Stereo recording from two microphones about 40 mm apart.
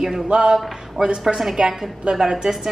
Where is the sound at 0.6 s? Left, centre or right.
Centre.